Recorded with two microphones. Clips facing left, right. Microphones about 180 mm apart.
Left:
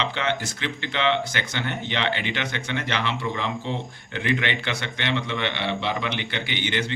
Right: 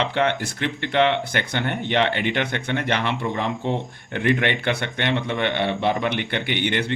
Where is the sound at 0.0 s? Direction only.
55° right (ahead or behind).